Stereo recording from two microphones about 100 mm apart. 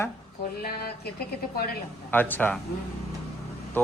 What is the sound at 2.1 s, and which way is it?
Speech, 20° left (ahead or behind).